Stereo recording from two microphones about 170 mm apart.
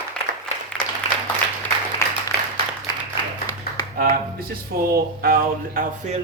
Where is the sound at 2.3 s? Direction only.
70° left (ahead or behind).